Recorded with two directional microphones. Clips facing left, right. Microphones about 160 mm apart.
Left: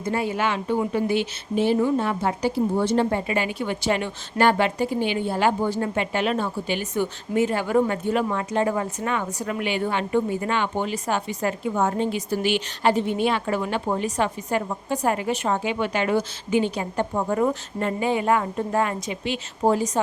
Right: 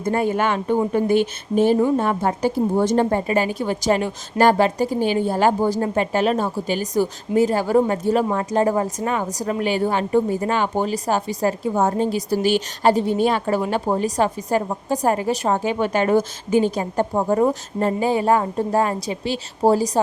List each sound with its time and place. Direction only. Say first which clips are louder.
0.0 s speech: right 4 dB; 50° right (ahead or behind)